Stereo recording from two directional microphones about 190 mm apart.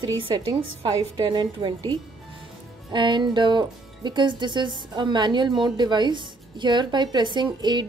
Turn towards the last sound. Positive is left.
turn(degrees=-25)  # may be behind; listen again after turning